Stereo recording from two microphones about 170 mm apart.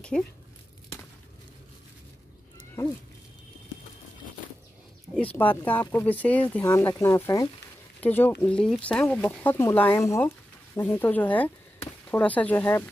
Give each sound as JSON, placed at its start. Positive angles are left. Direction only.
{"t": 5.2, "sound": "speech", "side_deg": 10}